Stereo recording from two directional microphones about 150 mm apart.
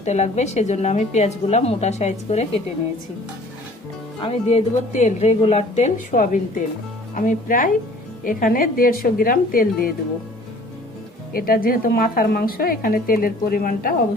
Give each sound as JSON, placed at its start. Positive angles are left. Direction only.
{"t": 0.0, "sound": "a woman's voice", "side_deg": 50}
{"t": 4.2, "sound": "a woman's voice", "side_deg": 40}
{"t": 11.3, "sound": "a woman's voice", "side_deg": 80}